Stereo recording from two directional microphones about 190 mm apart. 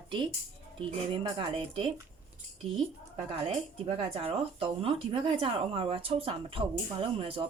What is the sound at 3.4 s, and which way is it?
Speech, 30° right (ahead or behind).